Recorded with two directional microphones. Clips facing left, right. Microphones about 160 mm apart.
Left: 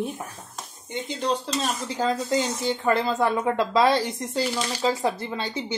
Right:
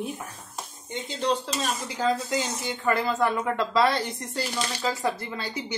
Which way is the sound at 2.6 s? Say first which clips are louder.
Left 2 dB; 25° left (ahead or behind).